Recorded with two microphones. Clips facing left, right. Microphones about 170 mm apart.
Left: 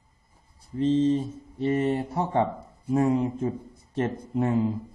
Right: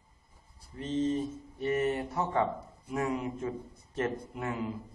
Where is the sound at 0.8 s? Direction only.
30° left (ahead or behind).